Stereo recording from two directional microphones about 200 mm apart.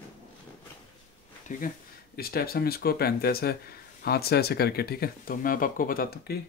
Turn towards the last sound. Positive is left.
turn(degrees=50)  # may be behind; listen again after turning